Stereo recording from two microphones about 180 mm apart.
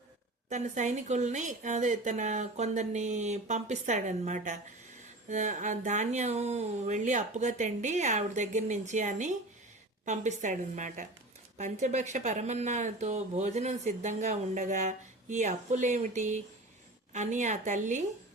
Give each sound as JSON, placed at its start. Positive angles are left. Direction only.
{"t": 0.5, "sound": "a woman's voice", "side_deg": -40}